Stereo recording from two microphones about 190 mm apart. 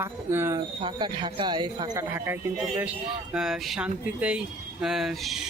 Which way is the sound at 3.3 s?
5° right (ahead or behind).